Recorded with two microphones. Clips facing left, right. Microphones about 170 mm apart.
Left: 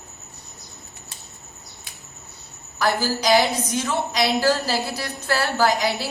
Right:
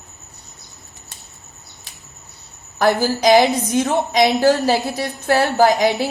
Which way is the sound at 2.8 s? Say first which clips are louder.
Right 6 dB; 50° right (ahead or behind).